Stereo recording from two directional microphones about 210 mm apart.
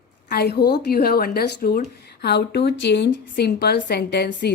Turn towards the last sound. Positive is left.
turn(degrees=50)  # may be behind; listen again after turning